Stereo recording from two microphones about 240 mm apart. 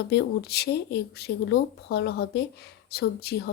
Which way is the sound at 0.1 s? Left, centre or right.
Left.